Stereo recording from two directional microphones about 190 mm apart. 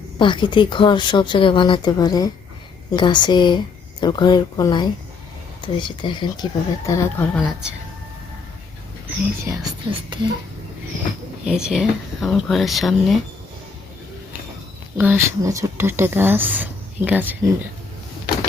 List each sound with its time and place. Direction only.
0.2 s speech: 25° left (ahead or behind)
7.3 s speech: centre (ahead or behind)
9.0 s speech: 15° right (ahead or behind)
11.4 s speech: 5° right (ahead or behind)
14.9 s speech: 10° right (ahead or behind)